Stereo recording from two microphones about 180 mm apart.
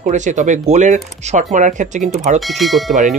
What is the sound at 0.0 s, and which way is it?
Speech, 45° right (ahead or behind).